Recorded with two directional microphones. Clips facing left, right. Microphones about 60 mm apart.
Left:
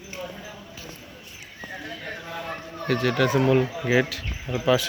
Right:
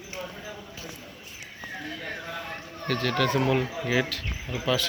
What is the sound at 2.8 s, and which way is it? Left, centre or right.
Speech, centre.